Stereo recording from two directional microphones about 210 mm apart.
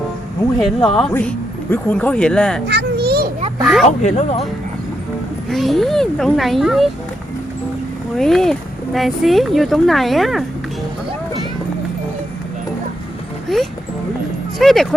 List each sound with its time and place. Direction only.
0.9 s speech: 5° left (ahead or behind)
2.6 s a sound: 50° right (ahead or behind)
3.6 s speech: centre (ahead or behind)
3.8 s speech: 30° left (ahead or behind)
5.5 s speech: centre (ahead or behind)
8.1 s speech: centre (ahead or behind)
13.5 s speech: centre (ahead or behind)